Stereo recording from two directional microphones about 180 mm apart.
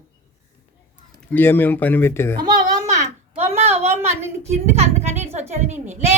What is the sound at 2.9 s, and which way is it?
A child's voice, 35° right (ahead or behind).